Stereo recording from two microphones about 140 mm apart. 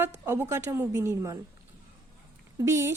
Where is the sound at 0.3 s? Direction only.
20° right (ahead or behind).